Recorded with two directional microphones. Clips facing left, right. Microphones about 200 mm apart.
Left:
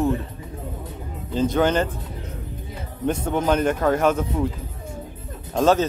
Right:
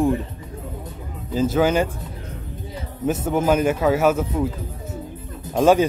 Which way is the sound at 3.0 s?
5° right (ahead or behind).